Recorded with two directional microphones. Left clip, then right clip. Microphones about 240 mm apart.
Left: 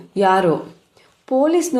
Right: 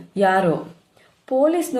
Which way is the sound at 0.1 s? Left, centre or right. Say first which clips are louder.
Left 2 dB; left.